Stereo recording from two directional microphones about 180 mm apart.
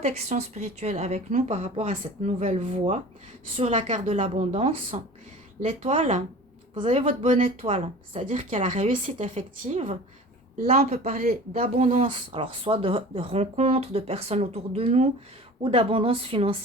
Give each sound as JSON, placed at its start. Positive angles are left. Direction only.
{"t": 0.0, "sound": "speech", "side_deg": -40}
{"t": 7.6, "sound": "speech", "side_deg": -35}